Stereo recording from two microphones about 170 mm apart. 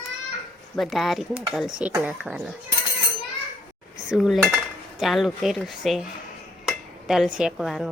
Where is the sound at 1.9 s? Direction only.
15° right (ahead or behind).